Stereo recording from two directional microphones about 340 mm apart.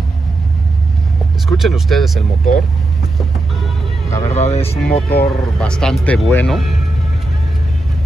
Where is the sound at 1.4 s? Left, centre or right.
Centre.